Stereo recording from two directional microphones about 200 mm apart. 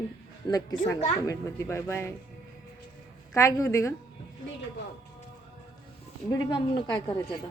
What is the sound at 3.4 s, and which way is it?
Speech, 15° left (ahead or behind).